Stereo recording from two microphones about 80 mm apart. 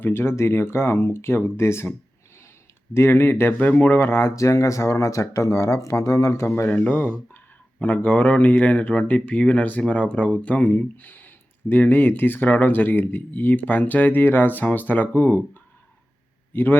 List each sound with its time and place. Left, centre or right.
0.0 s speech: left
6.8 s speech: left
16.5 s a man's voice: left